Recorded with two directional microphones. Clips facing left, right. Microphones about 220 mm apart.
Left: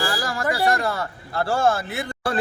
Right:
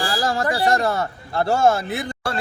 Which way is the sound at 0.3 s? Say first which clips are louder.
Right 3 dB; 25° right (ahead or behind).